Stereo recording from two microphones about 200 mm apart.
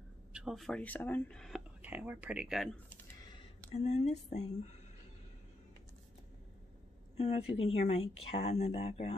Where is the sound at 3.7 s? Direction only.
35° left (ahead or behind).